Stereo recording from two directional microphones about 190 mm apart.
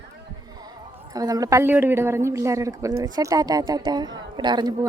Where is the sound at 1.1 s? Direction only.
20° right (ahead or behind).